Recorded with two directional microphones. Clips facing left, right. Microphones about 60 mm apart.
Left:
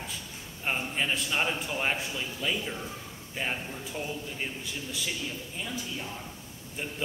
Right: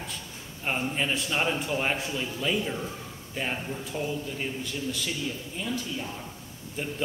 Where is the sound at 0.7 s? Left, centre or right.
Centre.